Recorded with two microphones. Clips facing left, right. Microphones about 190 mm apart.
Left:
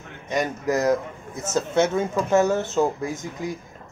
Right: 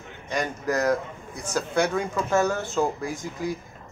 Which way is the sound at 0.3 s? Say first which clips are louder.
Left 3 dB; 20° left (ahead or behind).